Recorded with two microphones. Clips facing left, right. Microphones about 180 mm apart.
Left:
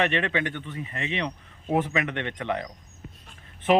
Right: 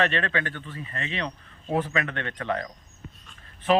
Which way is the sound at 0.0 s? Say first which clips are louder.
Left 1 dB; 15° left (ahead or behind).